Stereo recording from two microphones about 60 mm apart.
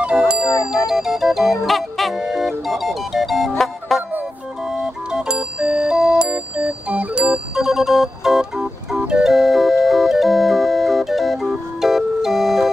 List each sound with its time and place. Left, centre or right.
0.0 s music: centre
4.6 s music: centre
6.2 s music: right
7.5 s organ: centre
9.3 s music: centre